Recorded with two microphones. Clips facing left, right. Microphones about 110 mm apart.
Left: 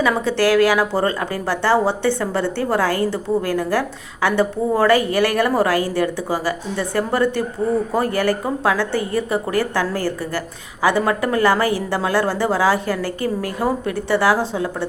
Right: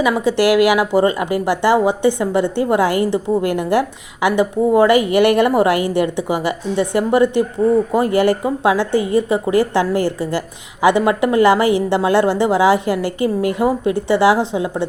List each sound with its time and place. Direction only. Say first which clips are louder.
0.0 s a woman's voice: right 3 dB; 15° right (ahead or behind)